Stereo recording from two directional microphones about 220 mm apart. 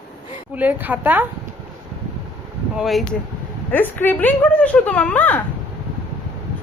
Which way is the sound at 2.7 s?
Centre (ahead or behind).